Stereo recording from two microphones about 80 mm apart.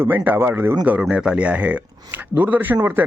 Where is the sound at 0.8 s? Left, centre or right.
Centre.